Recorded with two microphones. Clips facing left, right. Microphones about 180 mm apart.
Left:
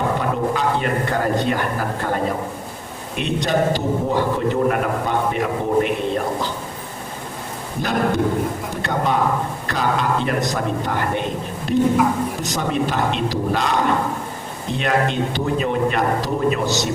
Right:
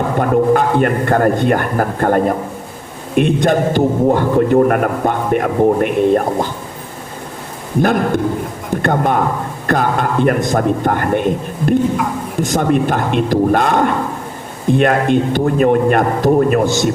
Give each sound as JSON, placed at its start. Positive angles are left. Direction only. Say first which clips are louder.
{"t": 0.2, "sound": "a man's voice", "louder": "right 8 dB", "side_deg": -55}
{"t": 8.7, "sound": "a man's voice", "louder": "right 8 dB", "side_deg": -50}